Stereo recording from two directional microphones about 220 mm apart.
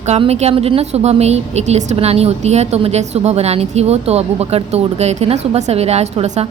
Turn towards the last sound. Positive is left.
turn(degrees=-30)  # may be behind; listen again after turning